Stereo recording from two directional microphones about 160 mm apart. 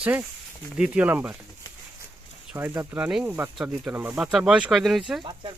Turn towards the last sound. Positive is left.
turn(degrees=-30)  # may be behind; listen again after turning